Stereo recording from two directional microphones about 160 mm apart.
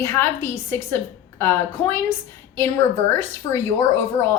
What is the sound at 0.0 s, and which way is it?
A woman's voice, 15° left (ahead or behind).